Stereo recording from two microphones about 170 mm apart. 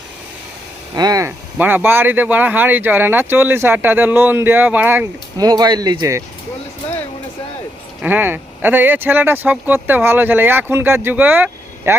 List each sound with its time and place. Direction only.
0.9 s speech: 20° right (ahead or behind)
1.5 s speech: 10° right (ahead or behind)
5.4 s speech: 25° right (ahead or behind)
8.0 s speech: 10° right (ahead or behind)